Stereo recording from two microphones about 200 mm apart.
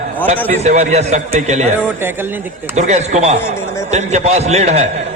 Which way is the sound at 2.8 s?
35° right (ahead or behind).